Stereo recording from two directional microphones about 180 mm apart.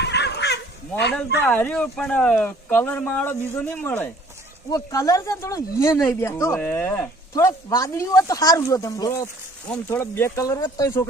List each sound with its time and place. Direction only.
0.0 s dog: 70° left (ahead or behind)
1.5 s speech: 10° left (ahead or behind)
7.3 s speech: 20° left (ahead or behind)